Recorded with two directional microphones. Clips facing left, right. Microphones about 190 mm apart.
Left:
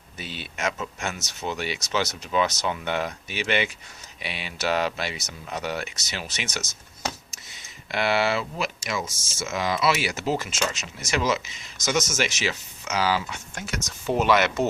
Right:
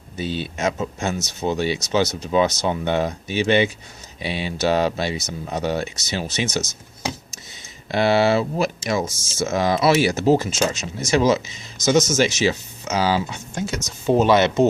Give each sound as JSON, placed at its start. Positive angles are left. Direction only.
{"t": 0.2, "sound": "speech", "side_deg": -30}
{"t": 7.9, "sound": "speech", "side_deg": -30}